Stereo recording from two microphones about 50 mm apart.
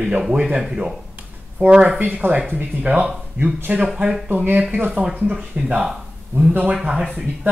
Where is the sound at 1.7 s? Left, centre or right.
Right.